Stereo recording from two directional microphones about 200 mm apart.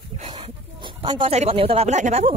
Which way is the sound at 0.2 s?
25° right (ahead or behind).